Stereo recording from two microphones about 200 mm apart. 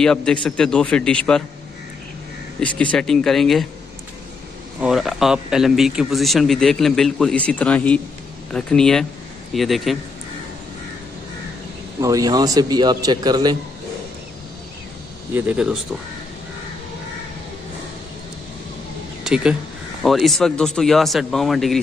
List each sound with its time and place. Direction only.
0.0 s speech: 5° left (ahead or behind)
2.6 s speech: 5° left (ahead or behind)
4.7 s speech: centre (ahead or behind)
12.0 s a man's voice: 15° right (ahead or behind)
15.3 s speech: 5° right (ahead or behind)
19.2 s speech: 5° right (ahead or behind)